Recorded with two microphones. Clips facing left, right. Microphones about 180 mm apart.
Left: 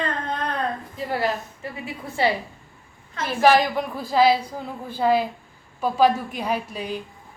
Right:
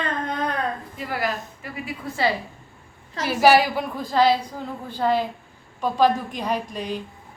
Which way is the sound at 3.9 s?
5° left (ahead or behind).